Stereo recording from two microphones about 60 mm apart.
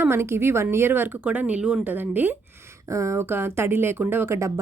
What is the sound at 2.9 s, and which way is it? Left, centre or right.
Speech, right.